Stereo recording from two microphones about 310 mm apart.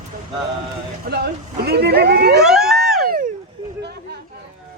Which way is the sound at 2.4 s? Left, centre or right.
Centre.